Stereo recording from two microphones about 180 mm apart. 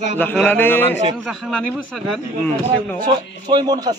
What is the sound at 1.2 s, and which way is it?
Speech, centre (ahead or behind).